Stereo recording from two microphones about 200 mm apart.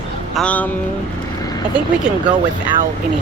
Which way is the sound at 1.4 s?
20° left (ahead or behind).